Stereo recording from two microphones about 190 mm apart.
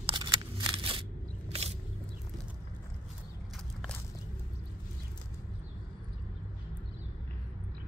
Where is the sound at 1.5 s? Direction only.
30° right (ahead or behind).